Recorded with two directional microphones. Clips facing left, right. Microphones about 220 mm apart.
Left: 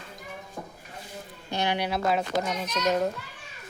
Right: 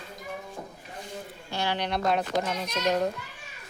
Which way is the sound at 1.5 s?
15° left (ahead or behind).